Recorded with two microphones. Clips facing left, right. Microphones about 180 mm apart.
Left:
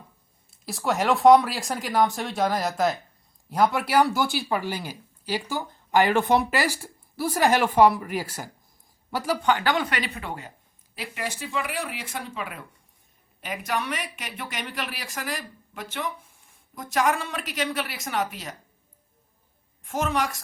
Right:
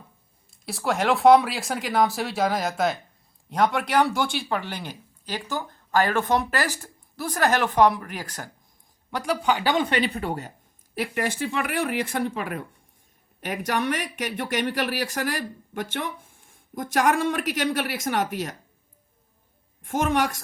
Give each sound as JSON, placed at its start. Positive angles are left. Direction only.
{"t": 0.5, "sound": "speech", "side_deg": 0}
{"t": 9.4, "sound": "speech", "side_deg": -10}
{"t": 9.8, "sound": "speech", "side_deg": -30}
{"t": 10.9, "sound": "speech", "side_deg": -55}
{"t": 19.8, "sound": "speech", "side_deg": -50}